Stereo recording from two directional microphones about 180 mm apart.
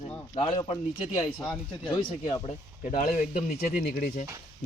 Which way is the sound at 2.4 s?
40° left (ahead or behind).